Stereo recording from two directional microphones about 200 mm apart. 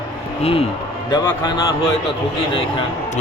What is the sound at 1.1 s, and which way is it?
Speech, 20° left (ahead or behind).